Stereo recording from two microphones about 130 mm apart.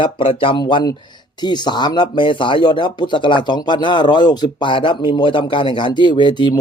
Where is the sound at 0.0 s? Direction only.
45° left (ahead or behind).